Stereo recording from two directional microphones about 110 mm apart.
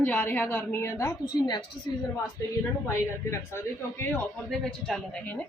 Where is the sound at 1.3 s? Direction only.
40° left (ahead or behind).